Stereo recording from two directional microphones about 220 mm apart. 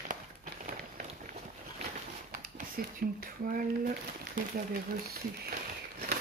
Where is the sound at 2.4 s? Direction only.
40° right (ahead or behind).